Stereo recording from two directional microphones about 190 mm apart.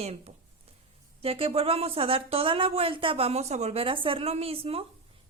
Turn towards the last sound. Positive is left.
turn(degrees=-30)  # may be behind; listen again after turning